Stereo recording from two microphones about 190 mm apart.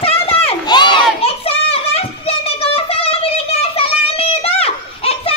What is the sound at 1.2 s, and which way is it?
Children playing, 30° left (ahead or behind).